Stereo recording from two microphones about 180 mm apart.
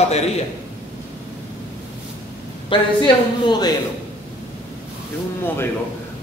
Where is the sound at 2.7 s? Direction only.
25° left (ahead or behind).